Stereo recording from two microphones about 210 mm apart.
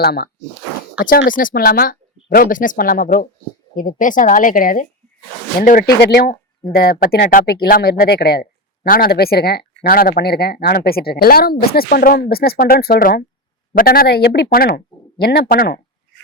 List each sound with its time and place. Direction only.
0.0 s a woman's voice: 50° left (ahead or behind)